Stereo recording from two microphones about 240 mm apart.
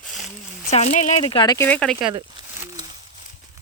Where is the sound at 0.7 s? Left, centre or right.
Left; by 1.9 s centre.